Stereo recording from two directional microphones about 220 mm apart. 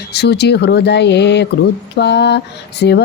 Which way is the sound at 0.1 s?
50° left (ahead or behind).